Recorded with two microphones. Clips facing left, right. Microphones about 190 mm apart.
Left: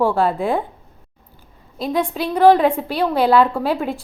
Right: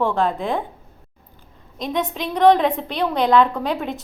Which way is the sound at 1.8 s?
5° left (ahead or behind).